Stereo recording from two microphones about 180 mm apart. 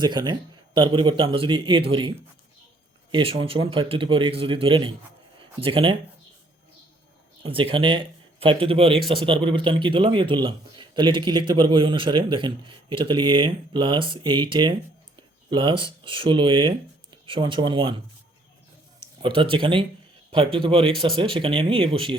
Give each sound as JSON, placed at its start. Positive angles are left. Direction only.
{"t": 0.0, "sound": "a man's voice", "side_deg": -25}
{"t": 7.4, "sound": "a man's voice", "side_deg": -30}
{"t": 19.2, "sound": "a man's voice", "side_deg": -30}